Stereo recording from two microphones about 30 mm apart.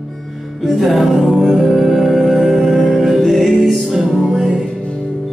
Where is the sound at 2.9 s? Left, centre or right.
Centre.